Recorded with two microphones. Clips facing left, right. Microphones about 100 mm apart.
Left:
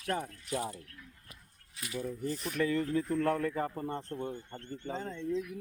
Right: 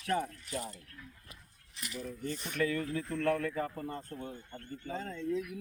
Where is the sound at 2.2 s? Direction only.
Centre (ahead or behind).